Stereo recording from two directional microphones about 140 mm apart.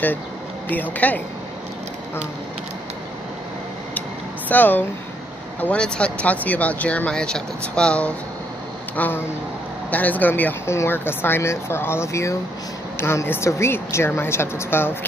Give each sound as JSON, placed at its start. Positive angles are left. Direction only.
{"t": 0.7, "sound": "speech", "side_deg": 10}
{"t": 4.5, "sound": "speech", "side_deg": 10}